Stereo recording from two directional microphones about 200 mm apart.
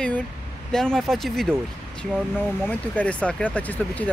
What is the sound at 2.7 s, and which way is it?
Speech, 5° left (ahead or behind).